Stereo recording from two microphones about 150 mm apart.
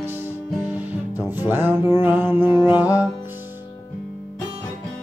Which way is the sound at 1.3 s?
15° right (ahead or behind).